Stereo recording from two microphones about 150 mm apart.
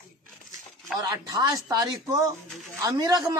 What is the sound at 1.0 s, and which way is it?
Speech, 25° right (ahead or behind).